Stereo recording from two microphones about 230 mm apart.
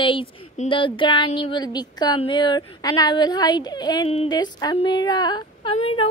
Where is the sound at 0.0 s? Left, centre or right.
Left.